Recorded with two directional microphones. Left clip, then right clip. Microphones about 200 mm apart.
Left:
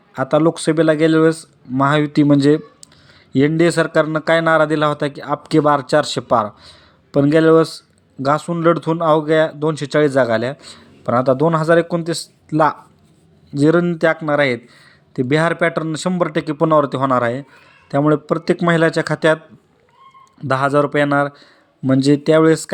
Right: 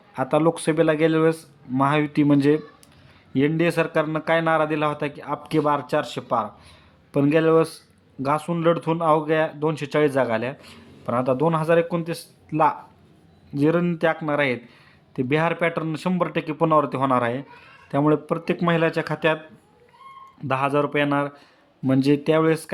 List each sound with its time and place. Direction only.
0.1 s speech: 15° left (ahead or behind)
20.5 s speech: 20° left (ahead or behind)